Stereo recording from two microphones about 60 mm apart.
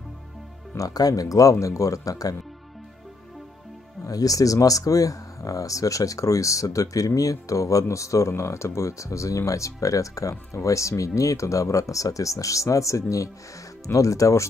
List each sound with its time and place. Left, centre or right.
0.7 s speech: left
4.0 s speech: left